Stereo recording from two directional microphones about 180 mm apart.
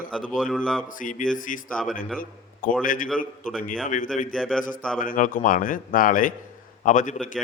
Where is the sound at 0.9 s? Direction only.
50° left (ahead or behind).